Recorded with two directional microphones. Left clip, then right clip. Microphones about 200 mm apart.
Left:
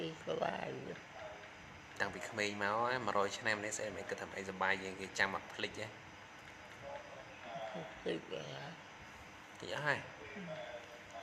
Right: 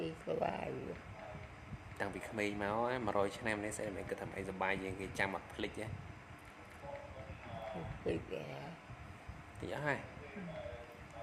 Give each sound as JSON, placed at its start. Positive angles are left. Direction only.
{"t": 0.0, "sound": "a sound", "side_deg": -5}
{"t": 2.0, "sound": "speech", "side_deg": -15}
{"t": 8.1, "sound": "speech", "side_deg": -5}
{"t": 9.6, "sound": "speech", "side_deg": -15}